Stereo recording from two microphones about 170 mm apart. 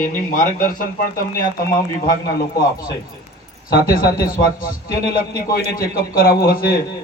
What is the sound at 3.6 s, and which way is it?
Speech, 60° left (ahead or behind).